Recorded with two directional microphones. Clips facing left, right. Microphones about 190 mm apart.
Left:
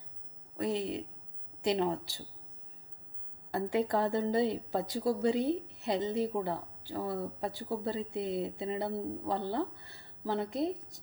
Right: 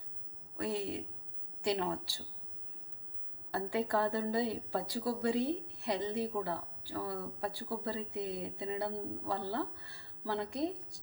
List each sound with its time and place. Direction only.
0.5 s a woman's voice: 20° left (ahead or behind)
3.5 s a woman's voice: 20° left (ahead or behind)